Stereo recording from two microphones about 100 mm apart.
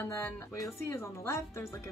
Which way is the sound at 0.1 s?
25° left (ahead or behind).